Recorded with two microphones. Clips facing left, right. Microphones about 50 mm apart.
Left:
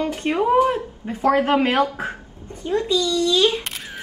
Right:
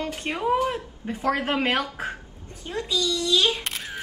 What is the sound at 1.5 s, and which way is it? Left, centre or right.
Speech, centre.